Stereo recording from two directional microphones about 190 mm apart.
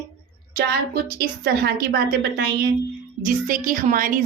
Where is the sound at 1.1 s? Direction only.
55° right (ahead or behind).